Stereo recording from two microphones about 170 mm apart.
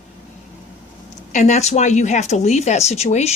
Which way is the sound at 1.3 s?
45° left (ahead or behind).